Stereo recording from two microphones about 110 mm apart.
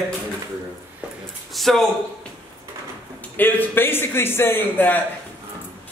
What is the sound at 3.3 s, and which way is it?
A man's voice, 20° left (ahead or behind).